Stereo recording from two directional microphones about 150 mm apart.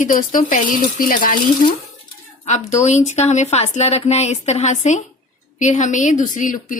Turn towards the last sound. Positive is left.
turn(degrees=60)  # may be behind; listen again after turning